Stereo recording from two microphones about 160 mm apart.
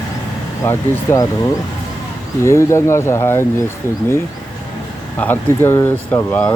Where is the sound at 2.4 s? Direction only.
15° left (ahead or behind).